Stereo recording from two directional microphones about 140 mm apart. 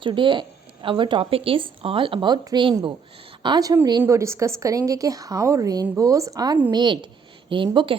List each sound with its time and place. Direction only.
0.0 s a woman's voice: 35° right (ahead or behind)